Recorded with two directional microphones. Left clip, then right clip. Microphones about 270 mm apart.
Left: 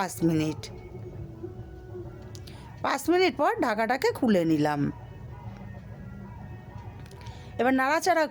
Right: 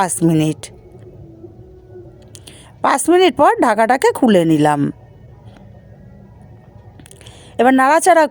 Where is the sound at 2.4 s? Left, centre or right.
Right.